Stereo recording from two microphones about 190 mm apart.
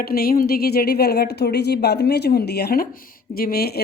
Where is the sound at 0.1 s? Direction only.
50° left (ahead or behind).